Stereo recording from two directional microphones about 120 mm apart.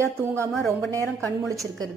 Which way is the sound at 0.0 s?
20° right (ahead or behind).